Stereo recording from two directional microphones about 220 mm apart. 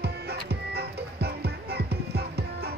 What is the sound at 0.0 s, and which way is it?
Music, 45° right (ahead or behind).